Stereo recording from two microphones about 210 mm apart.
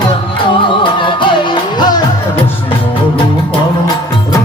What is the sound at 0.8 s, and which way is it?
Music, 25° left (ahead or behind).